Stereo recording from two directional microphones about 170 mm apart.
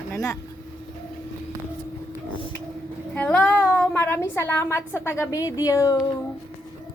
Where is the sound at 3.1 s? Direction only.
10° left (ahead or behind).